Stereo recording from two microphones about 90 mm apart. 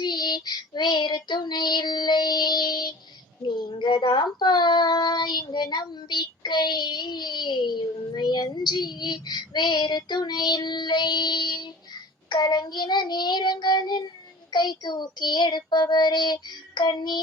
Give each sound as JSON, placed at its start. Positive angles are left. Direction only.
{"t": 0.0, "sound": "child singing", "side_deg": 55}
{"t": 3.5, "sound": "speech", "side_deg": 55}
{"t": 14.5, "sound": "child singing", "side_deg": 55}